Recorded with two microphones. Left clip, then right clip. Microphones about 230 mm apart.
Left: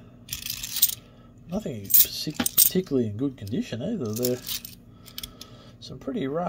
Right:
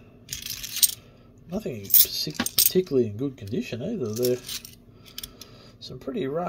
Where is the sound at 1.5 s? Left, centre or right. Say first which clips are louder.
Right 1 dB; centre.